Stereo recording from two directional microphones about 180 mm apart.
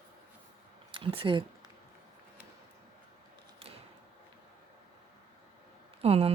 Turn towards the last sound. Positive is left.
turn(degrees=-35)  # may be behind; listen again after turning